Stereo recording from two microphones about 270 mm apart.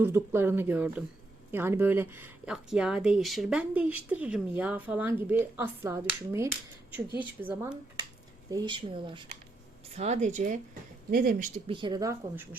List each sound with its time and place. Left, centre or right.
0.0 s speech: centre; by 11.4 s right
11.6 s speech: centre